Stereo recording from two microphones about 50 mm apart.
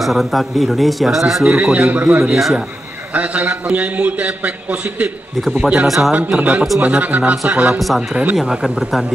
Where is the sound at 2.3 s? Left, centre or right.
Centre.